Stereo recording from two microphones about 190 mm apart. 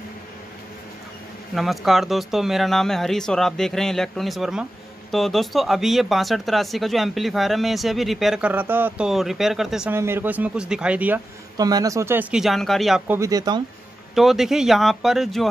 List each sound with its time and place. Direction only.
1.5 s speech: centre (ahead or behind)
11.5 s speech: 20° right (ahead or behind); by 13.2 s centre (ahead or behind)
13.2 s speech: 20° right (ahead or behind)
14.1 s speech: centre (ahead or behind)